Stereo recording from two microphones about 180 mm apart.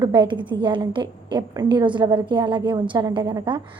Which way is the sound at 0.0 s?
25° right (ahead or behind).